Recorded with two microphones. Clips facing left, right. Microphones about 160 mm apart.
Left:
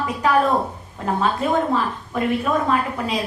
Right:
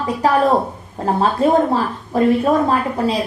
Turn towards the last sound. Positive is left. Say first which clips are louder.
# right 4 dB
turn(degrees=-35)  # may be behind; listen again after turning